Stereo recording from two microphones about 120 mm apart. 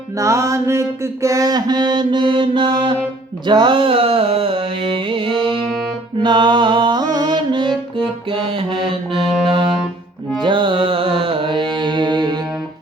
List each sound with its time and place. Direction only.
0.2 s mantra: 25° right (ahead or behind); by 3.0 s 40° right (ahead or behind)
3.4 s music: 40° right (ahead or behind)
7.7 s music: 5° left (ahead or behind)
8.3 s music: 45° right (ahead or behind)
10.4 s music: 45° right (ahead or behind)